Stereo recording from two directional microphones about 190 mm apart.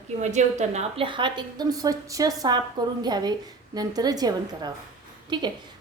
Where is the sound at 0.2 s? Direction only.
40° right (ahead or behind).